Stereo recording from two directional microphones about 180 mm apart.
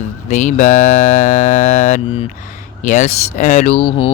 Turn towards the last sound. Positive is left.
turn(degrees=30)  # may be behind; listen again after turning